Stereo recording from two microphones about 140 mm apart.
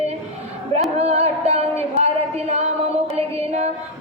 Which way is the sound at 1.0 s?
50° right (ahead or behind).